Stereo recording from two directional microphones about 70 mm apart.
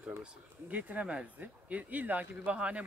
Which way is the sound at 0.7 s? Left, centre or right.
Right.